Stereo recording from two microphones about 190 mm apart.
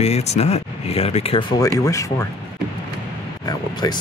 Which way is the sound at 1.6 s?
15° left (ahead or behind).